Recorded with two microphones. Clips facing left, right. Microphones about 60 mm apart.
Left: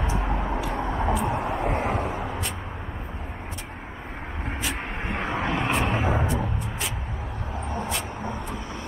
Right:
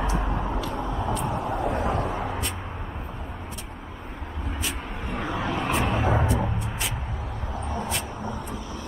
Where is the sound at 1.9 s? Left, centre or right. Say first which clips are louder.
Right 1 dB; centre.